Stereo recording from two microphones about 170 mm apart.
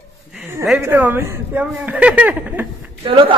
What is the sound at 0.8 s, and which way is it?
A man's voice, 10° right (ahead or behind).